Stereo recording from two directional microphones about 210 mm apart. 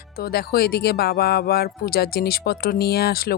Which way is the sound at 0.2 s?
45° left (ahead or behind).